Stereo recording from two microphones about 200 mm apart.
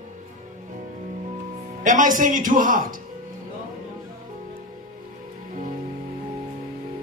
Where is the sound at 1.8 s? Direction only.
40° right (ahead or behind).